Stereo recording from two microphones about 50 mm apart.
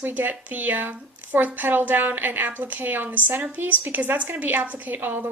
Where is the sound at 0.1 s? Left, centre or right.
Right.